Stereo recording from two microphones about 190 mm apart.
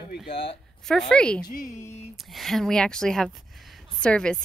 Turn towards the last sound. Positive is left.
turn(degrees=5)  # may be behind; listen again after turning